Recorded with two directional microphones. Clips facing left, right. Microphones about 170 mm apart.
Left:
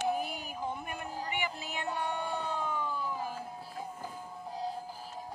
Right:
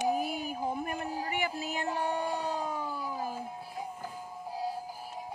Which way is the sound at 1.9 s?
10° right (ahead or behind).